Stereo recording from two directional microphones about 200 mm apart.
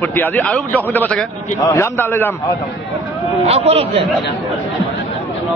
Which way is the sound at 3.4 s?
30° right (ahead or behind).